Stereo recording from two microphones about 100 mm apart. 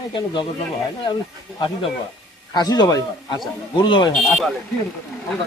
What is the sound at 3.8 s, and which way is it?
Speech, 55° left (ahead or behind).